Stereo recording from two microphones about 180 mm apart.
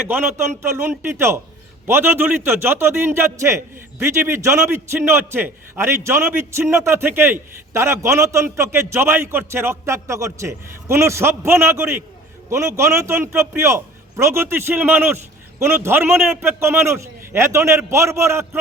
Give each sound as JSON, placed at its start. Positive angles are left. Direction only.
{"t": 0.8, "sound": "a man's voice", "side_deg": -15}